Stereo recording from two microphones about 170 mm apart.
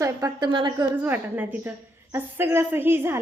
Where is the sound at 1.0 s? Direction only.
10° right (ahead or behind).